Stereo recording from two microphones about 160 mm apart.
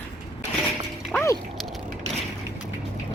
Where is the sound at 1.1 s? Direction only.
20° left (ahead or behind).